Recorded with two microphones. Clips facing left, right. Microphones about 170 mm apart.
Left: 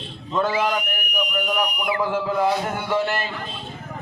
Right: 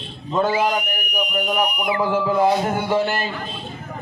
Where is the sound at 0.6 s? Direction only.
15° right (ahead or behind).